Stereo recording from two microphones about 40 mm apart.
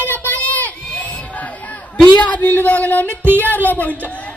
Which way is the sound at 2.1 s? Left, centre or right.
Left.